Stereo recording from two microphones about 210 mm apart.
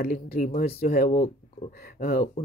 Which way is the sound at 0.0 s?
45° left (ahead or behind).